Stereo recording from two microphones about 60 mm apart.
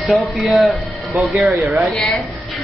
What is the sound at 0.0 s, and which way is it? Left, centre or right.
Speech, centre.